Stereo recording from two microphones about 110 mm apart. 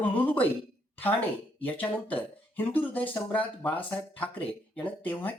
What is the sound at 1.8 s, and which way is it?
Speech, 15° left (ahead or behind).